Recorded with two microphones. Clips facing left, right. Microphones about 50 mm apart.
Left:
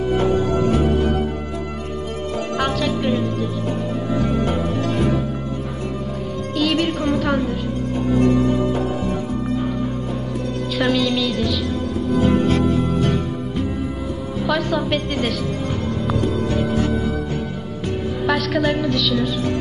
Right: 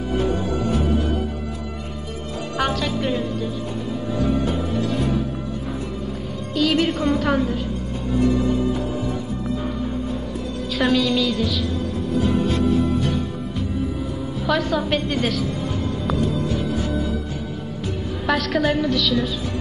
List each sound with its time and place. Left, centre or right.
0.5 s music: left
2.6 s music: centre
4.2 s music: left
6.5 s music: centre
10.8 s a woman's voice: centre
12.2 s music: left
12.4 s music: left
14.4 s a woman's voice: centre
16.5 s music: left
18.2 s a woman's voice: centre